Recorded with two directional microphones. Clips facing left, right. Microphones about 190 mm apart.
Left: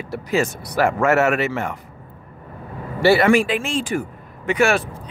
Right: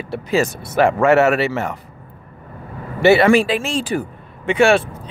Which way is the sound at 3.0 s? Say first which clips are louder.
Right 3 dB; 25° right (ahead or behind).